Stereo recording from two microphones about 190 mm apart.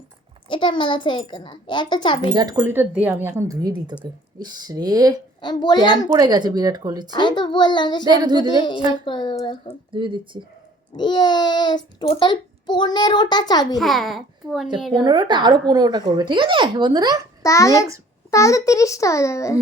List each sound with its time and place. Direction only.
0.4 s a child's voice: 25° left (ahead or behind)
2.3 s speech: 20° right (ahead or behind)
5.4 s a child's voice: 25° left (ahead or behind)
6.1 s speech: 20° right (ahead or behind)
7.1 s a child's voice: 25° left (ahead or behind)
8.0 s speech: 20° right (ahead or behind)
8.4 s a child's voice: 25° left (ahead or behind)
9.9 s speech: 25° right (ahead or behind)
10.9 s a child's voice: 25° left (ahead or behind)
13.7 s a child's voice: centre (ahead or behind)
14.9 s speech: 20° right (ahead or behind)
17.4 s a child's voice: 15° left (ahead or behind)